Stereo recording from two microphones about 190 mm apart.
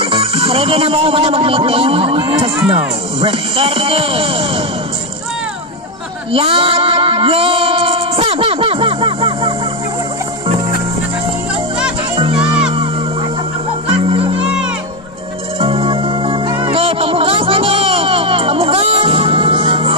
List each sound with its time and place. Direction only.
0.0 s speech: 30° right (ahead or behind)
6.3 s music: 30° right (ahead or behind)
12.2 s music: 30° right (ahead or behind)
14.0 s music: 30° right (ahead or behind)
15.6 s music: 30° right (ahead or behind)